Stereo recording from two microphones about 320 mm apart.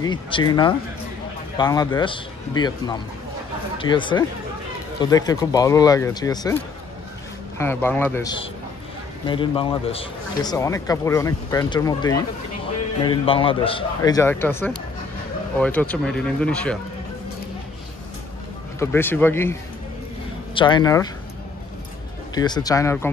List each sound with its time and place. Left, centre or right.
0.0 s a man's voice: centre
18.8 s a man's voice: centre
20.5 s a man's voice: centre
22.3 s a man's voice: centre